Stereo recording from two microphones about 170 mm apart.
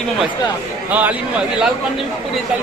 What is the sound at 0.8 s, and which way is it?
Speech, 10° right (ahead or behind).